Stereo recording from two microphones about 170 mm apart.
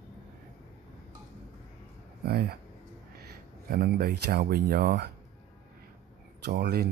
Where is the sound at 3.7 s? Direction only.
65° right (ahead or behind).